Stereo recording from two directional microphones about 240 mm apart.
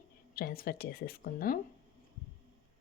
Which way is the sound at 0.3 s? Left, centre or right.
Left.